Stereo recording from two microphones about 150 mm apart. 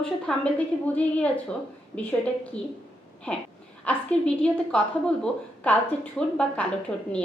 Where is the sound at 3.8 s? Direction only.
5° left (ahead or behind).